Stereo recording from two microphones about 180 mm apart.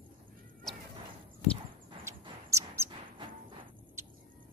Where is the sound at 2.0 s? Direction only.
15° right (ahead or behind).